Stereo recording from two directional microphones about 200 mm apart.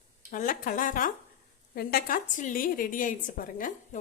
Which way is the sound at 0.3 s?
40° left (ahead or behind).